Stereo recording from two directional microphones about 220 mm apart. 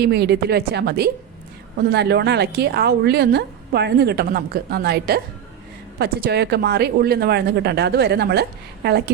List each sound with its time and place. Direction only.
0.0 s a woman's voice: 50° right (ahead or behind)